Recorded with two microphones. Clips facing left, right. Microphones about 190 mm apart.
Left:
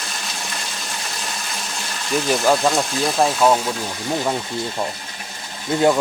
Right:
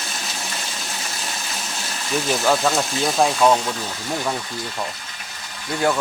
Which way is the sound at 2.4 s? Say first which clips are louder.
Left 1 dB; centre (ahead or behind).